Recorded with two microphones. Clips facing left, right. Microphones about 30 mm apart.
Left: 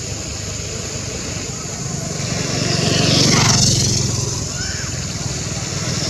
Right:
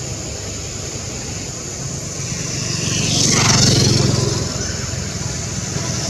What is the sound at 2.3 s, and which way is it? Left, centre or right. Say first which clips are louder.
Vehicle: left 5 dB; left.